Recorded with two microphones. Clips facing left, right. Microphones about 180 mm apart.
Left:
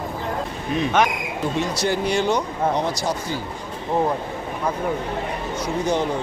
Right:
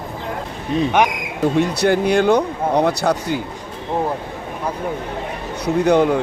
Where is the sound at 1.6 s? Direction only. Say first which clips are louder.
Right 6 dB; 60° right (ahead or behind).